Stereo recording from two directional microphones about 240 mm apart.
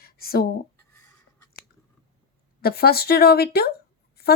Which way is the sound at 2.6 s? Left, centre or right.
Left.